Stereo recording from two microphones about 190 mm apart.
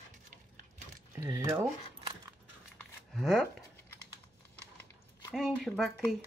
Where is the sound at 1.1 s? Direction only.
15° right (ahead or behind).